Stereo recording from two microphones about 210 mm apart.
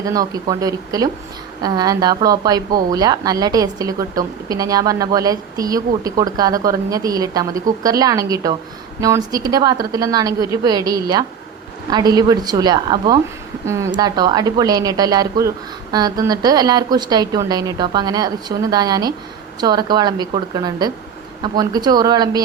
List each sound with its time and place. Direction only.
0.0 s a woman's voice: 15° right (ahead or behind)